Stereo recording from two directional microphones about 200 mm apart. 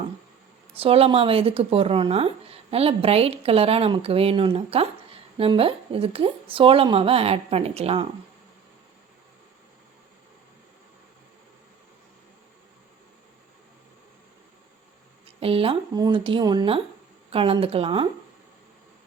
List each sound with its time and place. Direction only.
0.7 s speech: 30° right (ahead or behind)
15.4 s speech: 30° right (ahead or behind)